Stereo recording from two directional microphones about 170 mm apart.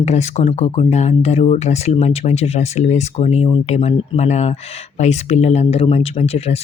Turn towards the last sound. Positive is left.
turn(degrees=35)  # may be behind; listen again after turning